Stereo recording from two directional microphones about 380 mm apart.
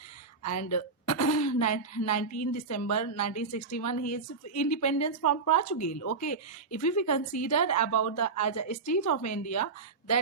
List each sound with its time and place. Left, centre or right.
0.4 s a woman's voice: left